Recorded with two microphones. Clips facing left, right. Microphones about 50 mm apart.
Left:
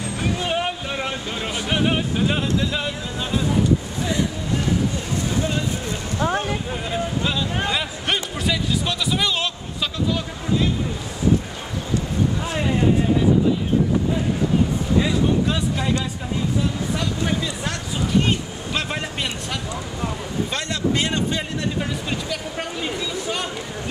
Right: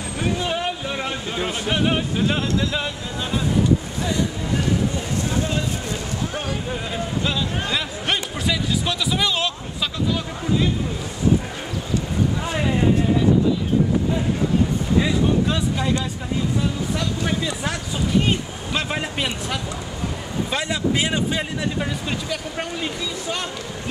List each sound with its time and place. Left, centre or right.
0.4 s vehicle: centre
0.9 s vehicle: centre
1.7 s music: centre
6.7 s speech: centre
12.4 s speech: centre
15.0 s speech: centre
16.9 s a man's voice: centre